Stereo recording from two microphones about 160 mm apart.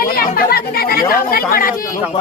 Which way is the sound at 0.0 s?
65° left (ahead or behind).